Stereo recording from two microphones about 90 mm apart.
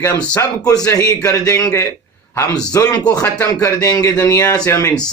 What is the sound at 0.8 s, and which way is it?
Speech, 40° left (ahead or behind).